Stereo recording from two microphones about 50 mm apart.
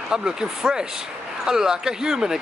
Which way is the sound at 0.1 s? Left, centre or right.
Centre.